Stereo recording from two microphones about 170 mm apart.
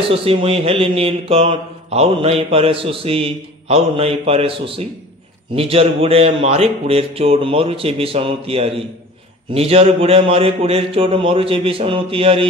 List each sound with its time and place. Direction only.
0.1 s mantra: 35° right (ahead or behind)